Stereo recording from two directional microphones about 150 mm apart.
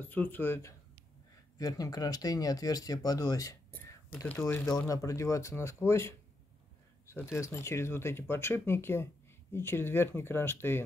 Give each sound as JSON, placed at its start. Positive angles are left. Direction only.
{"t": 0.0, "sound": "speech", "side_deg": 10}